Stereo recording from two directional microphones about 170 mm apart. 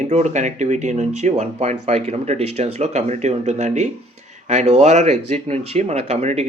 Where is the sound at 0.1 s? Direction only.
45° right (ahead or behind).